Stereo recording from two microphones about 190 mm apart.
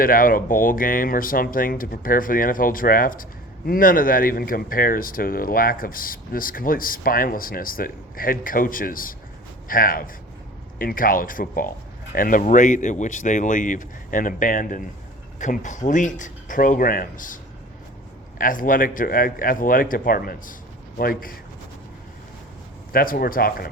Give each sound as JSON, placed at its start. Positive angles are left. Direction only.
{"t": 0.0, "sound": "speech", "side_deg": 50}
{"t": 22.9, "sound": "speech", "side_deg": 50}